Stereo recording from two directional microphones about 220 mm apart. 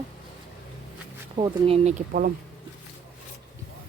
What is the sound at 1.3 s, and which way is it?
Speech, 25° right (ahead or behind).